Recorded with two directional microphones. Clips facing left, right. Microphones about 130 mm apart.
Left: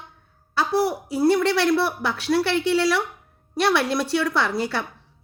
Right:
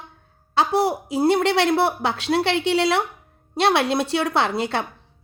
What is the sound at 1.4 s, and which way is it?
Speech, 70° right (ahead or behind).